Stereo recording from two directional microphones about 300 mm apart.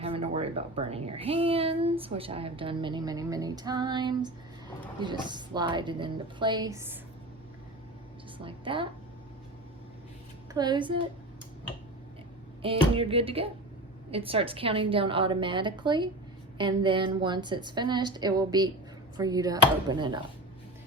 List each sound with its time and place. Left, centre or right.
0.0 s a woman's voice: centre
8.4 s a woman's voice: centre
10.5 s a woman's voice: centre
12.6 s a woman's voice: centre